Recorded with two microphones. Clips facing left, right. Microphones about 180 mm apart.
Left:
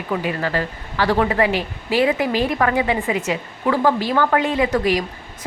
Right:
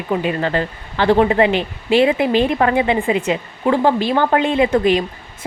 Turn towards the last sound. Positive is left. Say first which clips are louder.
# right 3 dB
turn(degrees=-25)  # may be behind; listen again after turning